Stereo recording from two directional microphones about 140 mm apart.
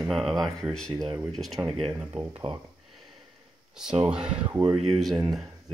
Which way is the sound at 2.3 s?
35° right (ahead or behind).